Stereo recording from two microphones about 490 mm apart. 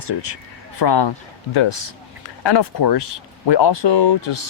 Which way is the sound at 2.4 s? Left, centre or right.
Left.